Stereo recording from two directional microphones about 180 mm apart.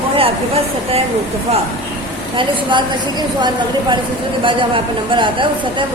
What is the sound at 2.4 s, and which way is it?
A woman's voice, 25° right (ahead or behind).